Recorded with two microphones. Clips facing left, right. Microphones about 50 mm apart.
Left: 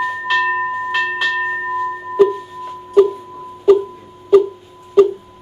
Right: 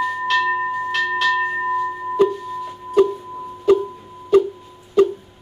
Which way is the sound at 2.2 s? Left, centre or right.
Centre.